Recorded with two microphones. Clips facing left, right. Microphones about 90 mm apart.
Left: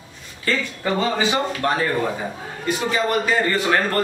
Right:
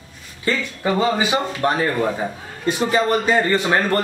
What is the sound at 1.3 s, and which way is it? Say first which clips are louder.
A man's voice: right 1 dB; 25° right (ahead or behind).